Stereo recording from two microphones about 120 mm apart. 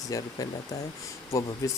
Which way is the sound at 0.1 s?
30° left (ahead or behind).